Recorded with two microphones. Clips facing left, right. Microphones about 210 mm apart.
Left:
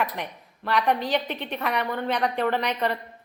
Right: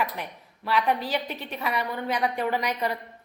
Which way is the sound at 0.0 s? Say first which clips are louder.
Left 1 dB; 5° right (ahead or behind).